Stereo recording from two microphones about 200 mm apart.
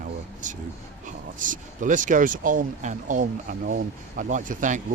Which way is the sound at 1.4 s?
40° right (ahead or behind).